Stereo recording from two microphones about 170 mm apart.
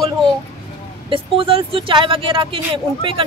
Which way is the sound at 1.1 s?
30° right (ahead or behind).